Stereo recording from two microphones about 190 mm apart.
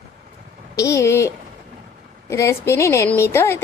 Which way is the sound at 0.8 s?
15° left (ahead or behind).